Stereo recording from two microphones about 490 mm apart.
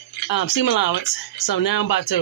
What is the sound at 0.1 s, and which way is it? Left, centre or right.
Speech, left.